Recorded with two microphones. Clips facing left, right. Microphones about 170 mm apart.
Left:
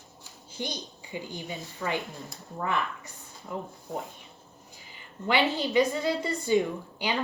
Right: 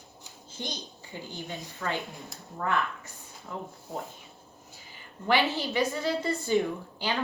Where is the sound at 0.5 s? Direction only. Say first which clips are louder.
Left 3 dB; 10° left (ahead or behind).